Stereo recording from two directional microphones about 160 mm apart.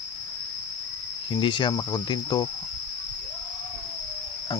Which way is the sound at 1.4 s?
30° left (ahead or behind).